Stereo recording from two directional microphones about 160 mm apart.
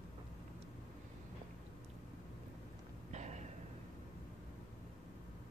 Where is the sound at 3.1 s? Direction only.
45° right (ahead or behind).